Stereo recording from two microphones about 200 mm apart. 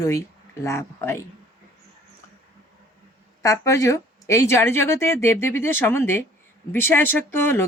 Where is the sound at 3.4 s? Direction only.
15° left (ahead or behind).